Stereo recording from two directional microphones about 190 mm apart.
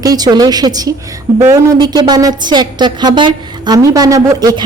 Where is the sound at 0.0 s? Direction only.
20° right (ahead or behind).